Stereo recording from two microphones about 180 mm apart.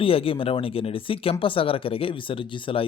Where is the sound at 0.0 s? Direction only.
30° left (ahead or behind).